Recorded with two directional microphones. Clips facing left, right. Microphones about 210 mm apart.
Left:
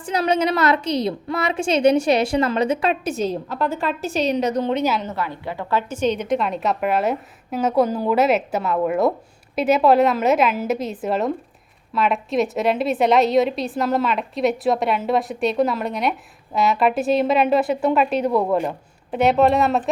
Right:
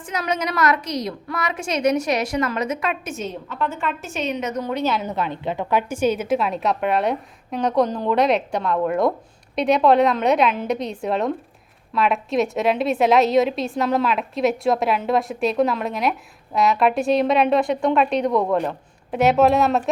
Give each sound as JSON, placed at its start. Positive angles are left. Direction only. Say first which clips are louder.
{"t": 0.0, "sound": "a woman's voice", "louder": "left 5 dB", "side_deg": 30}
{"t": 5.0, "sound": "a woman's voice", "louder": "right 2 dB", "side_deg": -20}